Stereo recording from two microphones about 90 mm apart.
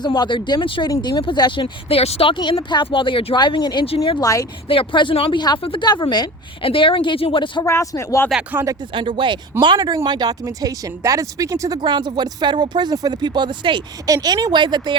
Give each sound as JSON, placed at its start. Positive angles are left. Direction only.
{"t": 0.0, "sound": "speech", "side_deg": 50}
{"t": 0.3, "sound": "speech", "side_deg": 65}
{"t": 3.3, "sound": "speech", "side_deg": 55}
{"t": 4.2, "sound": "speech", "side_deg": 40}
{"t": 4.7, "sound": "speech", "side_deg": 75}
{"t": 5.8, "sound": "speech", "side_deg": 55}
{"t": 6.6, "sound": "speech", "side_deg": 75}
{"t": 7.6, "sound": "speech", "side_deg": 35}
{"t": 9.0, "sound": "speech", "side_deg": -65}
{"t": 11.8, "sound": "speech", "side_deg": -60}
{"t": 14.1, "sound": "speech", "side_deg": -45}